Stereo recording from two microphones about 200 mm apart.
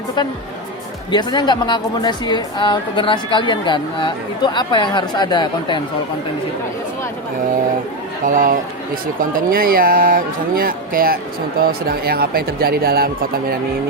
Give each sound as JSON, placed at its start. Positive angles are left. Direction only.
{"t": 1.1, "sound": "a woman's voice", "side_deg": 20}
{"t": 8.2, "sound": "speech", "side_deg": -40}